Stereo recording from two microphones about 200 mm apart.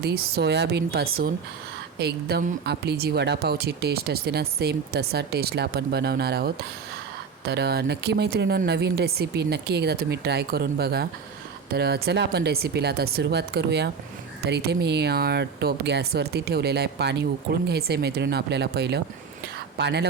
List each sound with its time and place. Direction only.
0.0 s speech: 50° right (ahead or behind)